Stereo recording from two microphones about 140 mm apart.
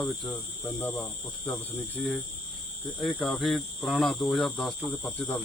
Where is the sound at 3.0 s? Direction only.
5° left (ahead or behind).